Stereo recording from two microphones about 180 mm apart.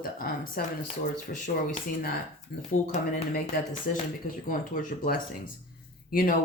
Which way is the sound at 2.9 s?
45° left (ahead or behind).